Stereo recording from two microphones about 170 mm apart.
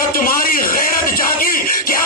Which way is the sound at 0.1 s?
55° left (ahead or behind).